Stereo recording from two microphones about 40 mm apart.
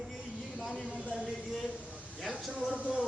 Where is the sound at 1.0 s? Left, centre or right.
Right.